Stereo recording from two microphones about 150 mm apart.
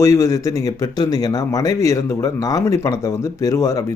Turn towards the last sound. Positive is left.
turn(degrees=20)  # may be behind; listen again after turning